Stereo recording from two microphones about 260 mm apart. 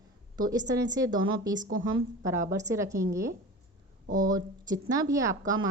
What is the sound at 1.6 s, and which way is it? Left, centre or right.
Speech, right.